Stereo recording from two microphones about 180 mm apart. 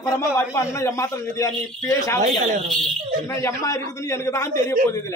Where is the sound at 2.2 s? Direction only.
40° right (ahead or behind).